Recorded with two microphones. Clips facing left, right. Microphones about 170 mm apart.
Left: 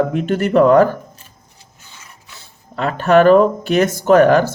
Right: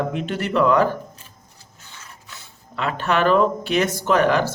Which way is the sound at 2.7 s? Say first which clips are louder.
Left 9 dB; 40° left (ahead or behind).